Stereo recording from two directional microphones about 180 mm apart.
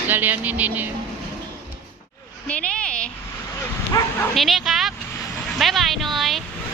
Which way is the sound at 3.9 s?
20° left (ahead or behind).